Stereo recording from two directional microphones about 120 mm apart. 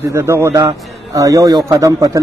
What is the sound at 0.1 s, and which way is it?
A man's voice, 25° right (ahead or behind).